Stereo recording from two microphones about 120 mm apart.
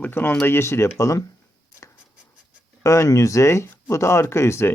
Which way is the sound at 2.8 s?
25° left (ahead or behind).